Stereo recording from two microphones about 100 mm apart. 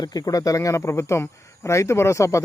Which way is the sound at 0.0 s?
40° left (ahead or behind).